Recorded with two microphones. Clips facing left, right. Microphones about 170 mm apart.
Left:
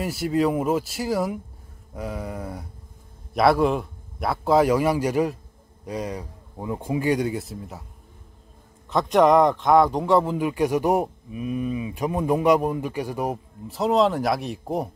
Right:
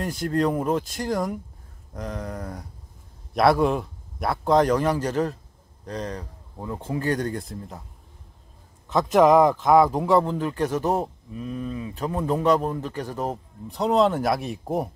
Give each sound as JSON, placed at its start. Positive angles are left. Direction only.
{"t": 0.0, "sound": "a man's voice", "side_deg": 5}
{"t": 8.8, "sound": "speech", "side_deg": 0}